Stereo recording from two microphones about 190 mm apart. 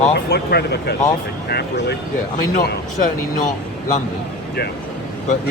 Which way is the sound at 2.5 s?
50° left (ahead or behind).